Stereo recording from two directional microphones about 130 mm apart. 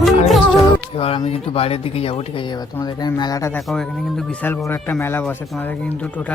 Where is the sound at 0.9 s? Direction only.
45° left (ahead or behind); by 3.5 s 30° left (ahead or behind).